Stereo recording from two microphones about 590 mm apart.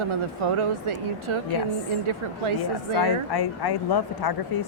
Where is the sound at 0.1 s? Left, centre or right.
Right.